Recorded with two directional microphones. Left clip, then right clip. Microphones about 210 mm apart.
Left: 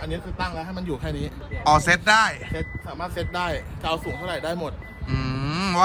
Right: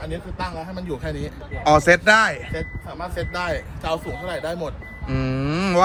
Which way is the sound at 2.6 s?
20° left (ahead or behind).